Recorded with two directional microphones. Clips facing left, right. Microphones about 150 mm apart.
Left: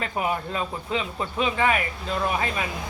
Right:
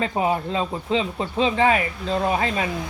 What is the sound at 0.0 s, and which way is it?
Speech, 30° right (ahead or behind).